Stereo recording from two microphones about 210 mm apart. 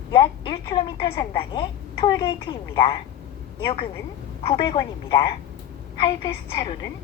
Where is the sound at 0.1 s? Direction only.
25° left (ahead or behind).